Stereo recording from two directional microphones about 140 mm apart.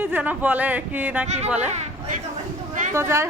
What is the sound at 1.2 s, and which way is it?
Speech, 55° right (ahead or behind).